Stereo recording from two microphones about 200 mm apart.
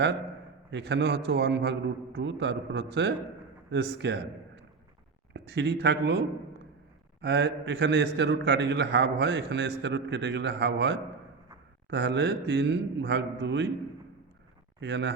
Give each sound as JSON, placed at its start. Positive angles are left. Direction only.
{"t": 0.7, "sound": "a man's voice", "side_deg": -60}
{"t": 14.8, "sound": "a man's voice", "side_deg": -60}